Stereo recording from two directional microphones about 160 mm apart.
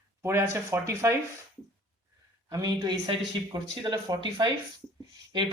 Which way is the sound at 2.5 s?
25° right (ahead or behind).